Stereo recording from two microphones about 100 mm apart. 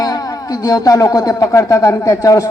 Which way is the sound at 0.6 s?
35° left (ahead or behind).